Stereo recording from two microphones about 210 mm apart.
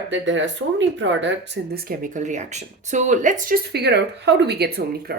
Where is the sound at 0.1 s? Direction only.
60° right (ahead or behind).